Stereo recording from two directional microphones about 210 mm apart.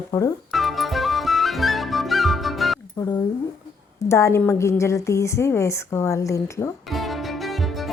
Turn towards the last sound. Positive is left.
turn(degrees=0)  # may be behind; listen again after turning